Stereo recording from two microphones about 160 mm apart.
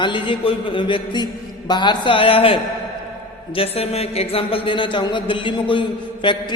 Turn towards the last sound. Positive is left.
turn(degrees=30)  # may be behind; listen again after turning